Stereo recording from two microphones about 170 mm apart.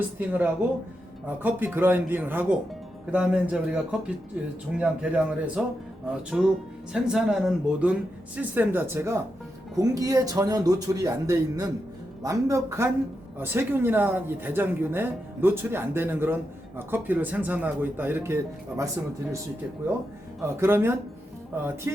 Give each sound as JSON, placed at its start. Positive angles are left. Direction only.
{"t": 0.2, "sound": "speech", "side_deg": -10}
{"t": 20.4, "sound": "speech", "side_deg": -15}